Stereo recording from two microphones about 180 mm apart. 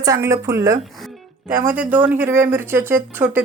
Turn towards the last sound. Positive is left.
turn(degrees=-10)  # may be behind; listen again after turning